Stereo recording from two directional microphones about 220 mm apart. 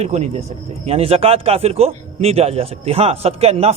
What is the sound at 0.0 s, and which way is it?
Speech, 30° right (ahead or behind).